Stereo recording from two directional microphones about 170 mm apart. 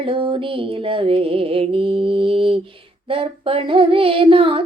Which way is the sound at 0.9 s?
30° right (ahead or behind).